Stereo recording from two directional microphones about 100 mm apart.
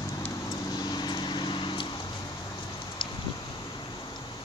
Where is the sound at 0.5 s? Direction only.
40° left (ahead or behind).